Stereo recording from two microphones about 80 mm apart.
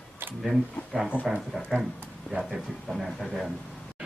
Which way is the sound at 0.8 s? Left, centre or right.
Left.